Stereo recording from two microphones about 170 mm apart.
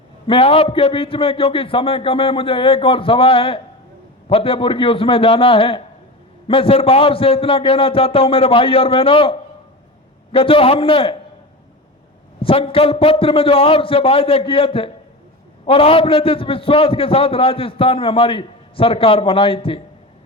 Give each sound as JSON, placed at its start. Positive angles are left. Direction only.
{"t": 0.3, "sound": "a man's voice", "side_deg": 35}
{"t": 10.3, "sound": "a man's voice", "side_deg": 35}
{"t": 12.4, "sound": "a man's voice", "side_deg": 35}